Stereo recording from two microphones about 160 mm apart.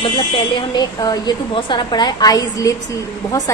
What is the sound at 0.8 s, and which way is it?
A woman's voice, 25° left (ahead or behind).